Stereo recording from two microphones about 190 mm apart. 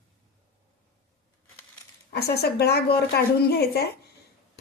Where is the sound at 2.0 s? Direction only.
55° left (ahead or behind).